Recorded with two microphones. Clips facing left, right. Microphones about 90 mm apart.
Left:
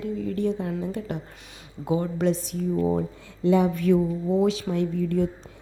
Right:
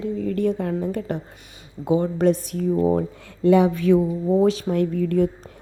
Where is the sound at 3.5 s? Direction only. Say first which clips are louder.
Right 4 dB; 85° right.